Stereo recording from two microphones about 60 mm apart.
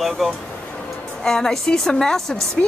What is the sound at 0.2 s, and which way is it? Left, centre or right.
Speech, centre.